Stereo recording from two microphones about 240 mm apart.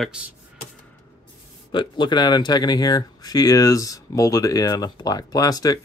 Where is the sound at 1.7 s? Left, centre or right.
Centre.